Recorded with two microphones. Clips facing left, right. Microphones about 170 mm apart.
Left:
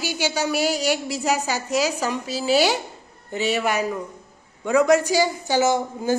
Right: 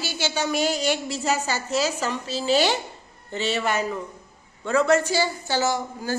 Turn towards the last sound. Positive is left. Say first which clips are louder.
# left 5 dB
turn(degrees=20)  # may be behind; listen again after turning